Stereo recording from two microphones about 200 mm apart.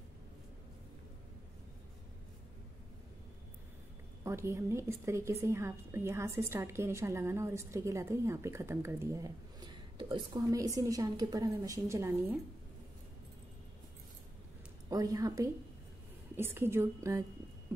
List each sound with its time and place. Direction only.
4.2 s a woman's voice: 15° right (ahead or behind)
14.9 s a woman's voice: 15° right (ahead or behind)